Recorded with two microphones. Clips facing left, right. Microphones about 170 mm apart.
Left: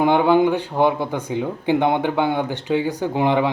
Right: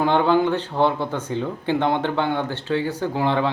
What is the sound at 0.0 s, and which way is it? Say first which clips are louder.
Speech: left 3 dB; 15° left (ahead or behind).